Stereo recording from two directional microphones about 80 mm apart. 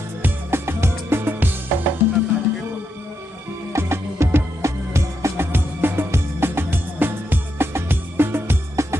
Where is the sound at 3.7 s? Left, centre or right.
Right.